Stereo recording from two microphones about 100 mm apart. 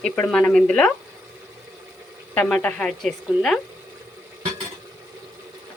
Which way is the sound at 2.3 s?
15° left (ahead or behind).